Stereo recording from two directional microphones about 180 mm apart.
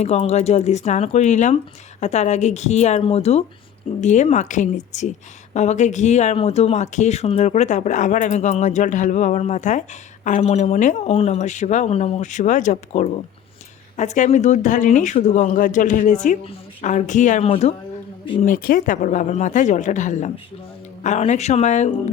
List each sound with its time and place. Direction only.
0.0 s speech: 40° left (ahead or behind)
18.4 s speech: 50° left (ahead or behind)